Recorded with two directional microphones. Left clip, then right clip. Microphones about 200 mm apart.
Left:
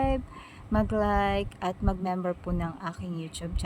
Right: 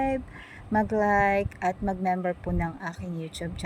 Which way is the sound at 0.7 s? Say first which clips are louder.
Right 3 dB; centre (ahead or behind).